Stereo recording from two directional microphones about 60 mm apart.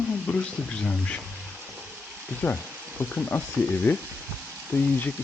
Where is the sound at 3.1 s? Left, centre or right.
Left.